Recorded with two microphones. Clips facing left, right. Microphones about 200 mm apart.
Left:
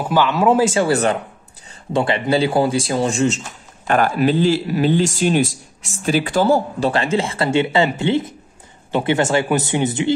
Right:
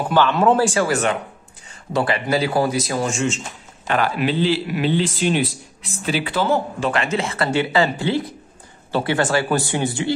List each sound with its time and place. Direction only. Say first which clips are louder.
0.1 s speech: left 1 dB; 10° left (ahead or behind)
0.6 s speech: left 3 dB; 20° left (ahead or behind)
3.8 s a man's voice: left 4 dB; 45° left (ahead or behind); by 10.1 s 20° left (ahead or behind)